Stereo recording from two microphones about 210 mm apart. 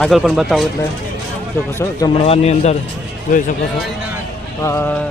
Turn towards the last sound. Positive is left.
turn(degrees=15)  # may be behind; listen again after turning